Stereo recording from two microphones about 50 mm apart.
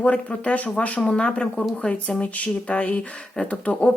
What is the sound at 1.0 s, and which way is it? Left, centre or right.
Speech, centre.